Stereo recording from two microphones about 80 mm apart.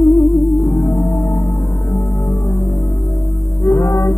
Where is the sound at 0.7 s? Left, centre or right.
Left.